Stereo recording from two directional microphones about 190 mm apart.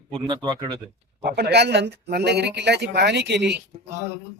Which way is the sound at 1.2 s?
55° right (ahead or behind).